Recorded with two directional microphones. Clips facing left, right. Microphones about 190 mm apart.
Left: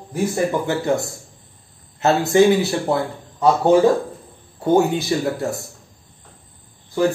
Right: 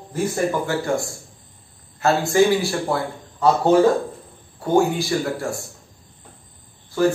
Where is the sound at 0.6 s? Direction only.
20° left (ahead or behind).